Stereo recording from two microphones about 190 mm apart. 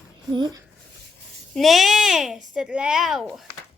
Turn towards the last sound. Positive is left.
turn(degrees=0)  # may be behind; listen again after turning